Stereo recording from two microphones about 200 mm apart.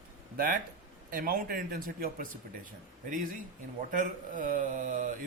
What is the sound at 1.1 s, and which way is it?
Speech, 45° right (ahead or behind).